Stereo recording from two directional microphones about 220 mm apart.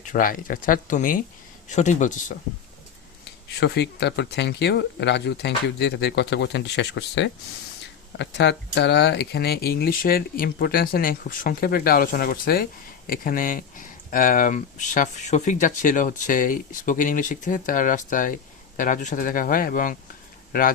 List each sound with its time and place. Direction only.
0.0 s speech: 40° left (ahead or behind)
3.6 s speech: 50° left (ahead or behind)